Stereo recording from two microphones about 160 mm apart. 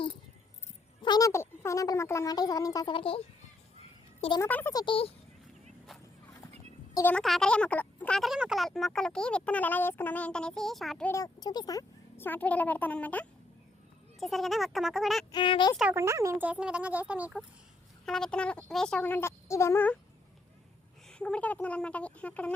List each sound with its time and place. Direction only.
1.0 s speech: 25° left (ahead or behind)
4.4 s speech: 10° left (ahead or behind)
4.7 s speech: 30° left (ahead or behind)
6.9 s speech: 10° left (ahead or behind)
11.1 s speech: 25° left (ahead or behind); by 15.3 s centre (ahead or behind)
15.3 s speech: 30° left (ahead or behind)
15.8 s speech: 15° right (ahead or behind)
18.0 s speech: 5° left (ahead or behind)
21.1 s speech: 5° left (ahead or behind)